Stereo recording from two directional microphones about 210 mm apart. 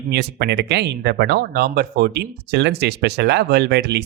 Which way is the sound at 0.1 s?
55° right (ahead or behind).